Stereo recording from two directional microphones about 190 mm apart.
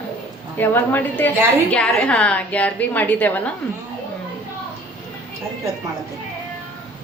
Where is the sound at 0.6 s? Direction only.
10° left (ahead or behind).